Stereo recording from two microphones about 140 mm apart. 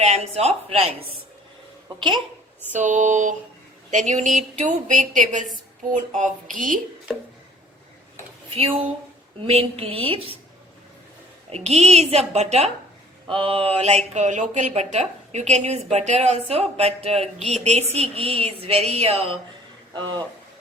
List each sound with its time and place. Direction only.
0.0 s speech: 50° right (ahead or behind)
2.7 s a woman's voice: 60° right (ahead or behind)
8.5 s speech: 40° right (ahead or behind)
11.5 s speech: 50° right (ahead or behind)
13.2 s speech: 40° right (ahead or behind)